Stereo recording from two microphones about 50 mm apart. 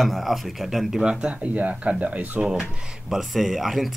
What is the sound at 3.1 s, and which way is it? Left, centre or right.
Speech, centre.